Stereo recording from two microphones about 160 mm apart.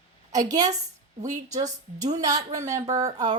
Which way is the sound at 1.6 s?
45° right (ahead or behind).